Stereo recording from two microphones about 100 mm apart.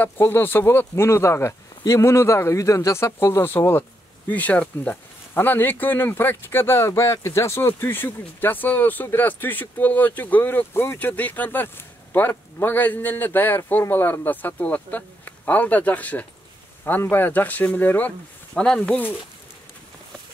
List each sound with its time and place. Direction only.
0.0 s speech: 25° left (ahead or behind)
18.5 s speech: 5° left (ahead or behind)